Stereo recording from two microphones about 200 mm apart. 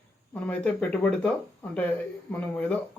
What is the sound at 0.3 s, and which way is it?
Speech, 5° left (ahead or behind).